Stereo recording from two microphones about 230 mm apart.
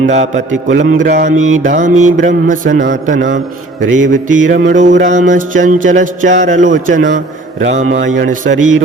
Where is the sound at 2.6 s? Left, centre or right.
Right.